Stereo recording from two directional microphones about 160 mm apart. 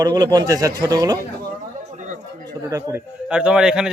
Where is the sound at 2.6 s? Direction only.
20° right (ahead or behind).